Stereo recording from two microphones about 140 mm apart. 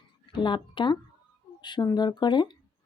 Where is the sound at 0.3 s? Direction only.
35° left (ahead or behind).